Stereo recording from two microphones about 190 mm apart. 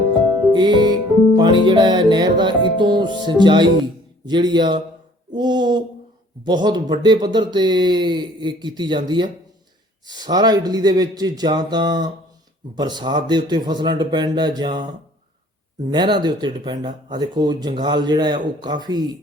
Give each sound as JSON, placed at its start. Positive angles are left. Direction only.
{"t": 0.5, "sound": "music", "side_deg": -25}
{"t": 1.4, "sound": "speech", "side_deg": -25}
{"t": 5.3, "sound": "a sound", "side_deg": -25}
{"t": 6.4, "sound": "speech", "side_deg": -25}
{"t": 15.9, "sound": "speech", "side_deg": -25}